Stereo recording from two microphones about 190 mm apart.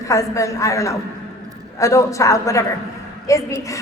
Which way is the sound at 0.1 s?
15° left (ahead or behind).